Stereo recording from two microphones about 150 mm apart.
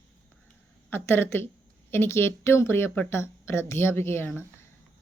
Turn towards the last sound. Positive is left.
turn(degrees=15)  # may be behind; listen again after turning